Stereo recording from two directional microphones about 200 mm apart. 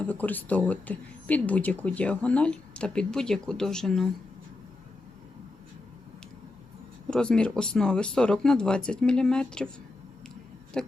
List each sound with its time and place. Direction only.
0.0 s speech: 10° left (ahead or behind)
7.1 s speech: 5° left (ahead or behind)
10.8 s a sound: 5° left (ahead or behind)